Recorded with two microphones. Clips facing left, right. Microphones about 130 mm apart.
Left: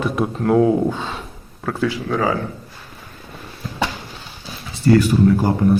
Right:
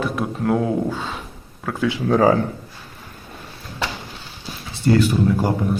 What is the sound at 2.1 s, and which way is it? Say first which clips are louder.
Speech: right 6 dB; 40° right (ahead or behind).